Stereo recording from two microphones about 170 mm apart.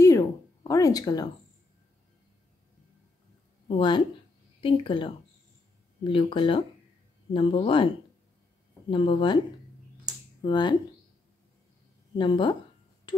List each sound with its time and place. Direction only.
0.0 s a sound: 20° left (ahead or behind)
3.6 s speech: 30° left (ahead or behind)
8.9 s speech: 30° left (ahead or behind)
10.4 s speech: 25° left (ahead or behind)
12.2 s speech: 30° left (ahead or behind)